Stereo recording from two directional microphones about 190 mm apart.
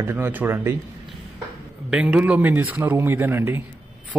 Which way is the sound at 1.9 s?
5° right (ahead or behind).